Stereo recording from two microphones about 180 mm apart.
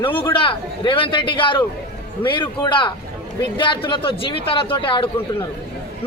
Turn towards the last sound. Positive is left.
turn(degrees=30)  # may be behind; listen again after turning